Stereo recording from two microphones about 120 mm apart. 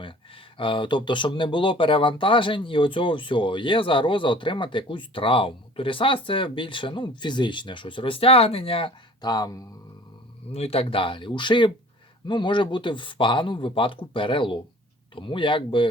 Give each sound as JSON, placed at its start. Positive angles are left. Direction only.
{"t": 0.5, "sound": "speech", "side_deg": 45}
{"t": 9.2, "sound": "speech", "side_deg": 35}
{"t": 10.5, "sound": "speech", "side_deg": 55}